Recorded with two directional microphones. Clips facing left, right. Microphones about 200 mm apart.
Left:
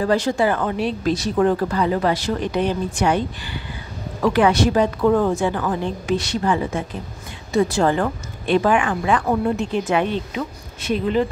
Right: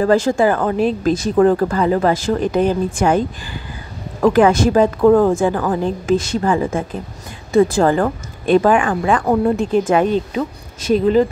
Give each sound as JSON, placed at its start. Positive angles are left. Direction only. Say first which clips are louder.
{"t": 0.0, "sound": "speech", "louder": "right 5 dB", "side_deg": -50}